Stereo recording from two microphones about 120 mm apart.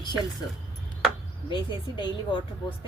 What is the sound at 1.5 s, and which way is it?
Speech, 40° left (ahead or behind).